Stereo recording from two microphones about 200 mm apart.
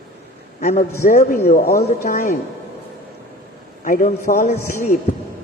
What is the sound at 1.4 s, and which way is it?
Speech, 50° left (ahead or behind).